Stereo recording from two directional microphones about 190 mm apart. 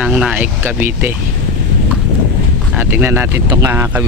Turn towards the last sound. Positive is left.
turn(degrees=-10)  # may be behind; listen again after turning